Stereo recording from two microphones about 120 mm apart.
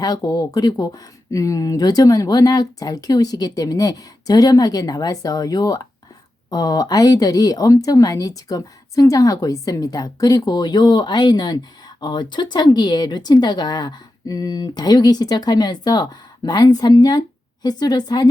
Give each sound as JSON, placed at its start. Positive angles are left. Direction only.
{"t": 0.0, "sound": "speech", "side_deg": 35}